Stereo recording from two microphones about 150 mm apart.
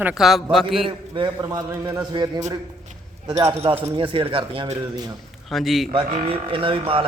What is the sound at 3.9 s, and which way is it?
Speech, 35° right (ahead or behind).